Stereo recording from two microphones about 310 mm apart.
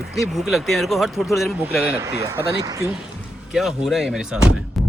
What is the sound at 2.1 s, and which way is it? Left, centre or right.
Speech, centre.